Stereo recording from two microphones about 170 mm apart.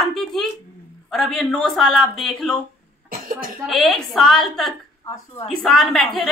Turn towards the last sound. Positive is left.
turn(degrees=0)  # may be behind; listen again after turning